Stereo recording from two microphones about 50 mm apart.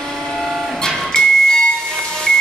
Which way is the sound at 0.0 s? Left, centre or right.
Centre.